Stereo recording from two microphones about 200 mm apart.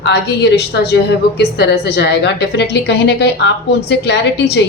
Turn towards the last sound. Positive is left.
turn(degrees=55)  # may be behind; listen again after turning